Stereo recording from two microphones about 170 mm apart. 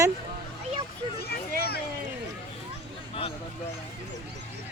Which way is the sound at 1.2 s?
65° left (ahead or behind).